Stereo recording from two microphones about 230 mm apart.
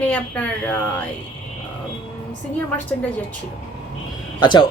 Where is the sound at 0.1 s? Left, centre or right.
Centre.